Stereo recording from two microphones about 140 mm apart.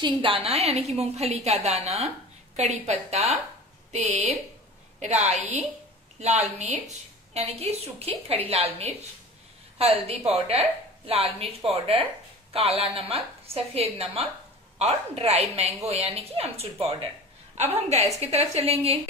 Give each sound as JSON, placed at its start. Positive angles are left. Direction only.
{"t": 0.2, "sound": "a woman's voice", "side_deg": -40}
{"t": 0.6, "sound": "a woman's voice", "side_deg": -50}